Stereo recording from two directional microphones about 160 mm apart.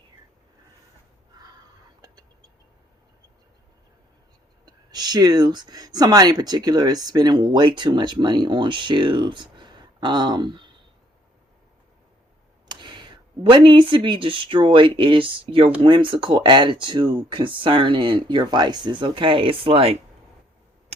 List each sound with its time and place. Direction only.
4.6 s speech: 25° right (ahead or behind)
12.6 s speech: 30° right (ahead or behind)